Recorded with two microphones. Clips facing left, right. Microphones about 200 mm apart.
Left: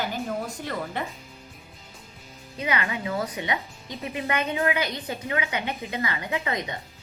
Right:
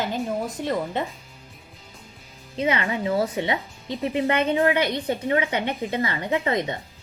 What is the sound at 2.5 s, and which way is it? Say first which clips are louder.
A woman's voice: right 4 dB; 30° right (ahead or behind).